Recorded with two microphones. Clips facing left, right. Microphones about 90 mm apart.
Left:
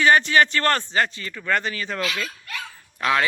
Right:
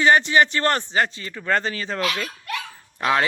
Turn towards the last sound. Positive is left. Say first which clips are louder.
# right 1 dB
turn(degrees=-30)  # may be behind; listen again after turning